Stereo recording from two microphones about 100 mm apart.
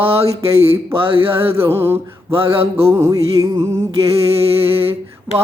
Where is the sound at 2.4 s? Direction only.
80° right.